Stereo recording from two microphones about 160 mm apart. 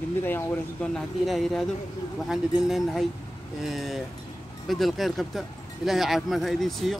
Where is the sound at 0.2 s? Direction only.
10° left (ahead or behind).